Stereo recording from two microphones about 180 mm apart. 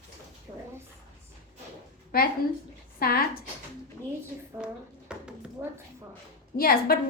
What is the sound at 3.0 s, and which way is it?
Speech, 55° left (ahead or behind).